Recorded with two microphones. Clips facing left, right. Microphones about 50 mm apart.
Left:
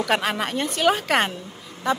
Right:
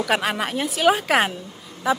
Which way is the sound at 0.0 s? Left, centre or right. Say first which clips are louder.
Right 1 dB; centre.